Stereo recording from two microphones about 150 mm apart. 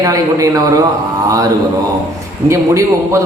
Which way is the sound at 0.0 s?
20° right (ahead or behind).